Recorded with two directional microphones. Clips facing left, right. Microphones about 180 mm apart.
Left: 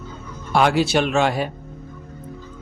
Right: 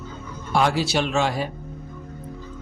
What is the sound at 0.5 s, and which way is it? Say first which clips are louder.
Speech: left 4 dB; 65° left (ahead or behind).